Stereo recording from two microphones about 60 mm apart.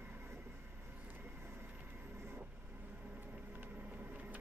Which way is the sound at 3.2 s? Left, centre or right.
Right.